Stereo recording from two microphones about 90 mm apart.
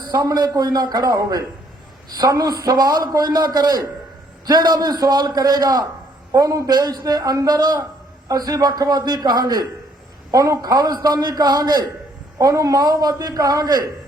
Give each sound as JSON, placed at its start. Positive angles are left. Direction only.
{"t": 0.1, "sound": "a man's voice", "side_deg": -40}